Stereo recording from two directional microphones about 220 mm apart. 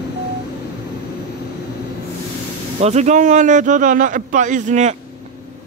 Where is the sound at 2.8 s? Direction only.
30° right (ahead or behind).